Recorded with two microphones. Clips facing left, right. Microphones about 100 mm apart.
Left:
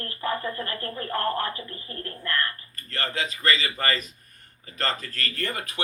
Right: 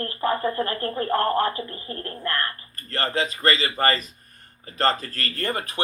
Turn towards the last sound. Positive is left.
turn(degrees=-35)  # may be behind; listen again after turning